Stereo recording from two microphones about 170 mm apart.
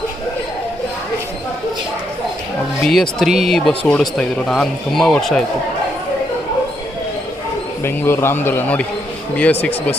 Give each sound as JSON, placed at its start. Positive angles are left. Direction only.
{"t": 2.8, "sound": "speech", "side_deg": 0}
{"t": 7.9, "sound": "a man's voice", "side_deg": 15}